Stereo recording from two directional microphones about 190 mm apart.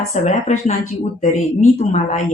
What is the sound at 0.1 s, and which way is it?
Speech, 40° left (ahead or behind).